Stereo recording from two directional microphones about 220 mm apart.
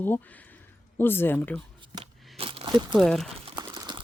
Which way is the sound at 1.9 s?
20° right (ahead or behind).